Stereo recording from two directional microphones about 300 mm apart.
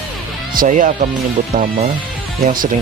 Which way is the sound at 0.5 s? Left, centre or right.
Right.